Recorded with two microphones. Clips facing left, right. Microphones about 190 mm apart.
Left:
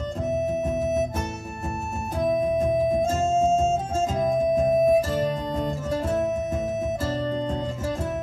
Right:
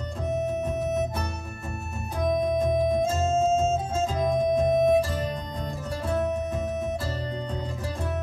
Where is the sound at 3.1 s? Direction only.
40° left (ahead or behind).